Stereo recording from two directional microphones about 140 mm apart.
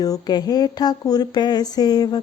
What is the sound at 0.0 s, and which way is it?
Speech, 30° left (ahead or behind).